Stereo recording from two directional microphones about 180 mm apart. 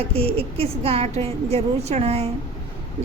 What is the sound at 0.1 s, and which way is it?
A woman's voice, 35° right (ahead or behind).